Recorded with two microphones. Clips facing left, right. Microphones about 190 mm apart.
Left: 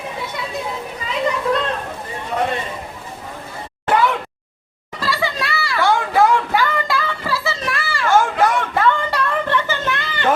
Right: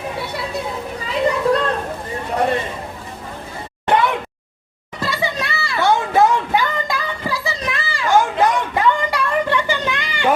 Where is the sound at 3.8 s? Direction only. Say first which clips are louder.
Even; 25° right (ahead or behind).